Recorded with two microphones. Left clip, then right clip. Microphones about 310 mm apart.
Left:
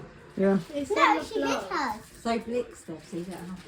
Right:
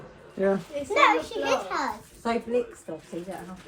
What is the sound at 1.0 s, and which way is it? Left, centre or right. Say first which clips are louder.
Speech: right 2 dB; centre.